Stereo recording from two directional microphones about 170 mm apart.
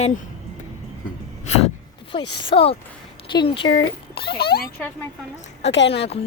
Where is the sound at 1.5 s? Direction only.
40° left (ahead or behind).